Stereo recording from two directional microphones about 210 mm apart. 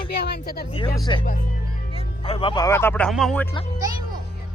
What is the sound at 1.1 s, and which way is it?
Speech, 20° left (ahead or behind).